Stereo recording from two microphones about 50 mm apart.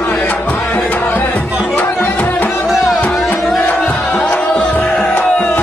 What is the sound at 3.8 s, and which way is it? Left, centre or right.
Music, centre.